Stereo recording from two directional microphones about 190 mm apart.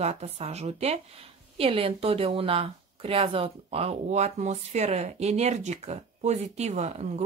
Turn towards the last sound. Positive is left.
turn(degrees=-35)  # may be behind; listen again after turning